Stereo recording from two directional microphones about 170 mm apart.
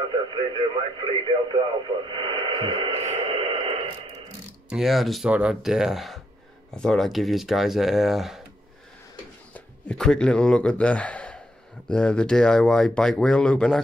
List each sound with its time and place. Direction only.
0.1 s speech: 30° right (ahead or behind)
4.6 s speech: centre (ahead or behind)
9.5 s speech: 5° left (ahead or behind)